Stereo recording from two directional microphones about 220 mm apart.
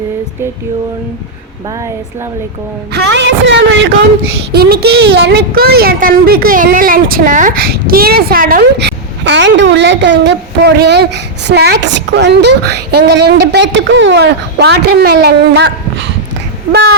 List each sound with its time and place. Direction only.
2.9 s speech: 50° right (ahead or behind)